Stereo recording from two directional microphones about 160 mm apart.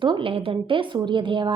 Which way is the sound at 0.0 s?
30° right (ahead or behind).